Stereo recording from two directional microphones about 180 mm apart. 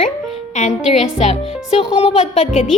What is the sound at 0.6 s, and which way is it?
A woman's voice, 40° left (ahead or behind).